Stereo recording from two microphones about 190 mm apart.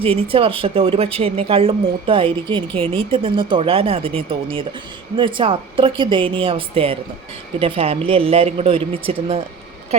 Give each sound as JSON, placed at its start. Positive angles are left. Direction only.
{"t": 0.0, "sound": "a woman's voice", "side_deg": -30}